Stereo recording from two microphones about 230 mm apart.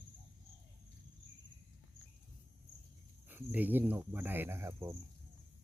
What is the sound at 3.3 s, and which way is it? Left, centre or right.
Speech, centre.